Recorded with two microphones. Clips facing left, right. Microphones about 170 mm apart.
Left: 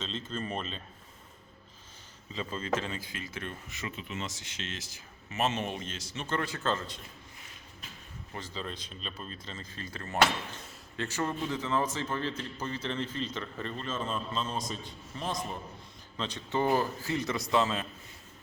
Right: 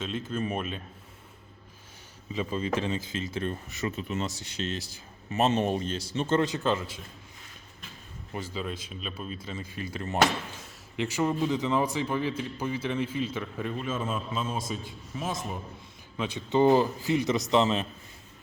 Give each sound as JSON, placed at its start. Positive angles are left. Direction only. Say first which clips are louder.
{"t": 0.0, "sound": "a man's voice", "louder": "right 5 dB", "side_deg": -10}
{"t": 2.3, "sound": "a man's voice", "louder": "right 4 dB", "side_deg": -15}
{"t": 8.3, "sound": "a man's voice", "louder": "right 5 dB", "side_deg": -10}
{"t": 16.6, "sound": "a man's voice", "louder": "right 7 dB", "side_deg": -20}